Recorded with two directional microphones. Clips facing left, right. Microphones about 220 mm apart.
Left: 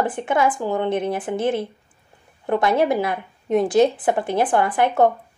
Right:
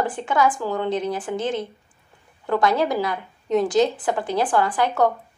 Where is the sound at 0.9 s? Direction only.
55° left (ahead or behind).